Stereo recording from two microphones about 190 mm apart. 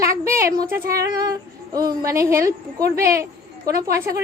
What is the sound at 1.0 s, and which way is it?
Female singing, 20° right (ahead or behind).